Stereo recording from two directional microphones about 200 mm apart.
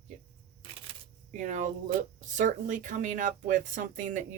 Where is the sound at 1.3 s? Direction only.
40° right (ahead or behind).